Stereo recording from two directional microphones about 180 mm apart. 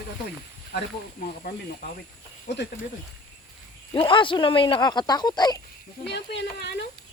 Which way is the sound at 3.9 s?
30° left (ahead or behind).